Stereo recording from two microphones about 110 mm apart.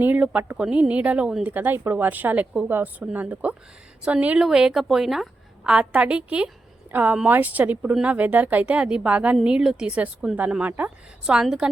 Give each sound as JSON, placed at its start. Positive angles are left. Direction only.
{"t": 0.0, "sound": "speech", "side_deg": -15}
{"t": 1.5, "sound": "speech", "side_deg": -20}